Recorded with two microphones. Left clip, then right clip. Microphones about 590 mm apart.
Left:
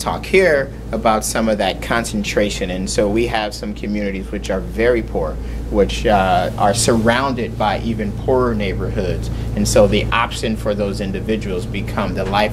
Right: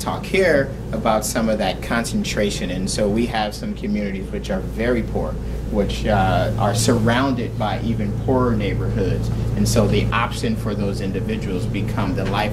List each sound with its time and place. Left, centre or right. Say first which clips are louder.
0.0 s speech: left 4 dB; left
6.0 s speech: left 3 dB; left
9.6 s speech: left 7 dB; left